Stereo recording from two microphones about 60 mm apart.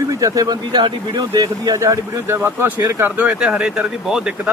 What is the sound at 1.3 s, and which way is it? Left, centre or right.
Speech, right.